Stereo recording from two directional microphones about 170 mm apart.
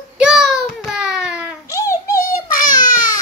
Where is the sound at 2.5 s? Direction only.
50° left (ahead or behind).